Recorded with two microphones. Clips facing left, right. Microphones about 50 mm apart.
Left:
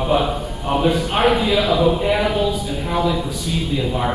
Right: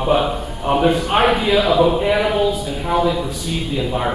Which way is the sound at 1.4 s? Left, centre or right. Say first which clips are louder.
Right 2 dB; centre.